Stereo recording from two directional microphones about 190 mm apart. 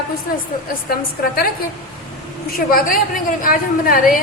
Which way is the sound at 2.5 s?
50° left (ahead or behind).